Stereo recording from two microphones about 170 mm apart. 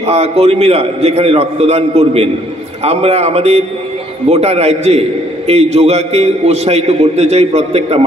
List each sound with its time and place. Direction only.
0.0 s a man's voice: 40° right (ahead or behind)